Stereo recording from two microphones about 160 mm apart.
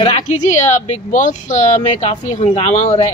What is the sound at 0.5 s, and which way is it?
Speech, 45° left (ahead or behind).